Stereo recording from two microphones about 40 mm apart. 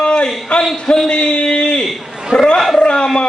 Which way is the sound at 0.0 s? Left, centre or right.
Left.